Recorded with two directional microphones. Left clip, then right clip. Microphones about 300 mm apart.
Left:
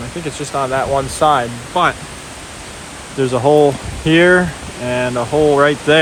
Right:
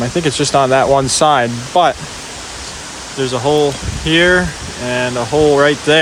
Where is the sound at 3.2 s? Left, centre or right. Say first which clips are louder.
Left 2 dB; centre.